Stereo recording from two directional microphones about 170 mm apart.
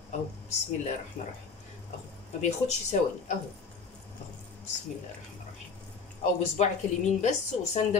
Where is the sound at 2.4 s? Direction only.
45° left (ahead or behind).